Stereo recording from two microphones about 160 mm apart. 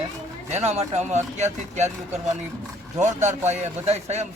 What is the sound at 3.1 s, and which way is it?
Speech, 45° right (ahead or behind).